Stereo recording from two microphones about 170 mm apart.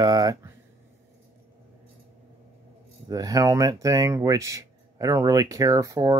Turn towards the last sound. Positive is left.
turn(degrees=-20)  # may be behind; listen again after turning